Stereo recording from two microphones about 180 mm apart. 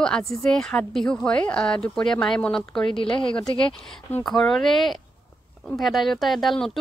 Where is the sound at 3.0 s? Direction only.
30° left (ahead or behind).